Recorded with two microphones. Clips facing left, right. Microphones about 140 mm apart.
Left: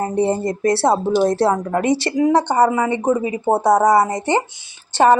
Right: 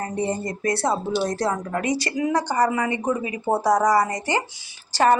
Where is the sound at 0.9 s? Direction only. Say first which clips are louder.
Left 8 dB; 50° left (ahead or behind).